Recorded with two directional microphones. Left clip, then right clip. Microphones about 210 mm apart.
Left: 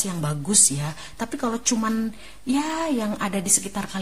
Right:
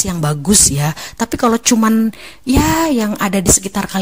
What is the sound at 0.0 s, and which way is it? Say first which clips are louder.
Speech: right 10 dB; 40° right (ahead or behind).